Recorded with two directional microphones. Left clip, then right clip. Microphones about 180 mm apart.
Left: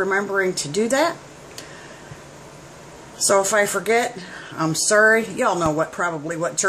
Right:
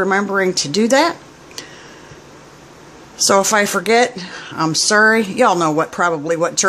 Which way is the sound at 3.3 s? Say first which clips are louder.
Right 4 dB; 45° right (ahead or behind).